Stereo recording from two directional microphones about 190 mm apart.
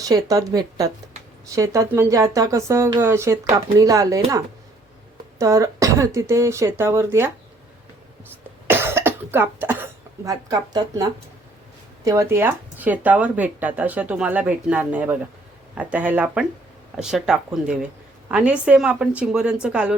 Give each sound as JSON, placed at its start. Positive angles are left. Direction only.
{"t": 0.0, "sound": "speech", "side_deg": -20}
{"t": 5.4, "sound": "speech", "side_deg": -15}
{"t": 8.6, "sound": "cough", "side_deg": -10}
{"t": 12.0, "sound": "a woman's voice", "side_deg": -15}